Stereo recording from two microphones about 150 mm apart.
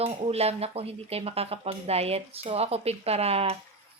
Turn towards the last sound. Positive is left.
turn(degrees=-45)  # may be behind; listen again after turning